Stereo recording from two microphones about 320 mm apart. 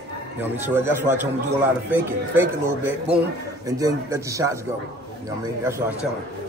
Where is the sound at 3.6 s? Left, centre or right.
Centre.